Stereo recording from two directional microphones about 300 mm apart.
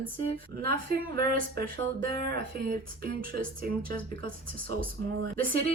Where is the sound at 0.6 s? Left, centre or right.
Right.